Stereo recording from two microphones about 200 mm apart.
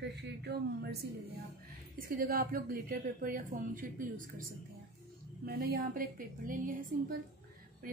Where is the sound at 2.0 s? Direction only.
45° right (ahead or behind).